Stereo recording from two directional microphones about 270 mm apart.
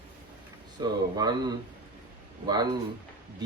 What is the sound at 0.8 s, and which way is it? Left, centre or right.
Speech, centre.